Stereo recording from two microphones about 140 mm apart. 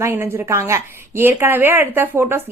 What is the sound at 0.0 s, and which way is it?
Speech, 15° right (ahead or behind).